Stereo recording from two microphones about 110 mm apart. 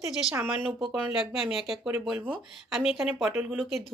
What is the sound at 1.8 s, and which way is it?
Speech, 15° right (ahead or behind).